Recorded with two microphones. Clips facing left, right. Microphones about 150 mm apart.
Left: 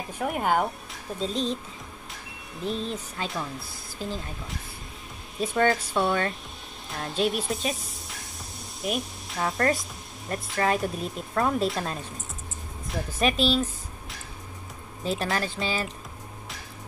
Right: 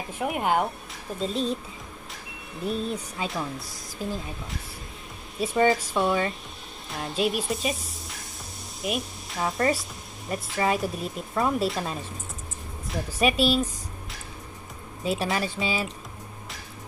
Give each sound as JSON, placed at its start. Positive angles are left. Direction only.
{"t": 0.2, "sound": "speech", "side_deg": -5}
{"t": 2.6, "sound": "speech", "side_deg": -10}
{"t": 5.4, "sound": "speech", "side_deg": -5}
{"t": 13.2, "sound": "speech", "side_deg": -10}
{"t": 15.0, "sound": "speech", "side_deg": -10}